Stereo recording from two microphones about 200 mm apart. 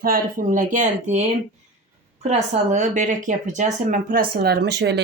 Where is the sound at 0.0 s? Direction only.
45° right (ahead or behind).